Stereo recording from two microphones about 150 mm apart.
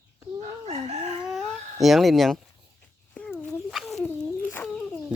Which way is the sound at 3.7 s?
Centre (ahead or behind).